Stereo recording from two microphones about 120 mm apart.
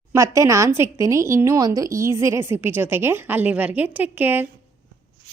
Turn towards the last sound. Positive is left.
turn(degrees=-15)  # may be behind; listen again after turning